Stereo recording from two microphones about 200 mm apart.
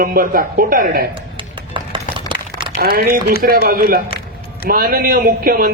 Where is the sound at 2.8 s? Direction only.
50° right (ahead or behind).